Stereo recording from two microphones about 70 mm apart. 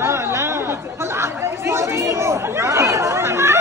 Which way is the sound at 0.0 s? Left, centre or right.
Right.